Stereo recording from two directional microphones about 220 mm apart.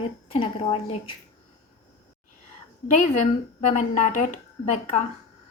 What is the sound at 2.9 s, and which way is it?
A woman's voice, 30° left (ahead or behind).